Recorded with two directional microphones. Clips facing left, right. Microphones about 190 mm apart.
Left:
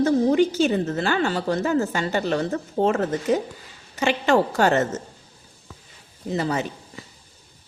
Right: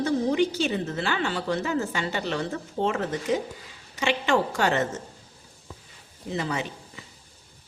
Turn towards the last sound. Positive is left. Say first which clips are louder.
# left 4 dB
turn(degrees=40)  # may be behind; listen again after turning